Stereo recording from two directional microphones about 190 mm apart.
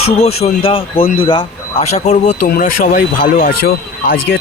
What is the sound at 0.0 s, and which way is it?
Speech, 30° left (ahead or behind).